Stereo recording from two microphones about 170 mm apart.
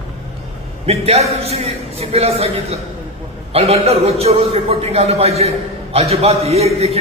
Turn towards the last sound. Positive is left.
turn(degrees=-35)  # may be behind; listen again after turning